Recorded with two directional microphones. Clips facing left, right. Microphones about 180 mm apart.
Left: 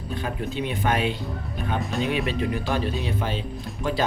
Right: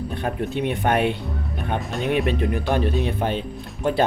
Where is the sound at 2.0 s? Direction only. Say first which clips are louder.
Right 7 dB; 55° right (ahead or behind).